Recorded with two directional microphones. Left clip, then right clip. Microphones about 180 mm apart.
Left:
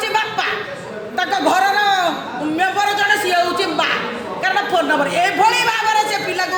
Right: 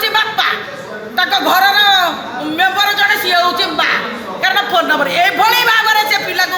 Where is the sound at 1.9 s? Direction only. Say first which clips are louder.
Right 4 dB; centre (ahead or behind).